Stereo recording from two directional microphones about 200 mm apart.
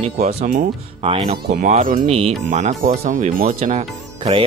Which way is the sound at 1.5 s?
45° right (ahead or behind).